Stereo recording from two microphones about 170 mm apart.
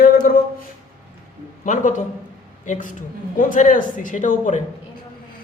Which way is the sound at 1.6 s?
50° left (ahead or behind).